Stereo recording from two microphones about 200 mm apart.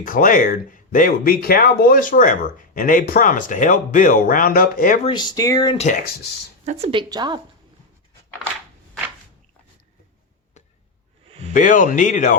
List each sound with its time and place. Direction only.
0.0 s speech: 45° left (ahead or behind)
5.0 s speech: 20° left (ahead or behind)
5.8 s speech: 40° left (ahead or behind)
6.7 s a woman's voice: 30° right (ahead or behind)
11.3 s a sound: 30° right (ahead or behind)
11.5 s speech: 40° left (ahead or behind)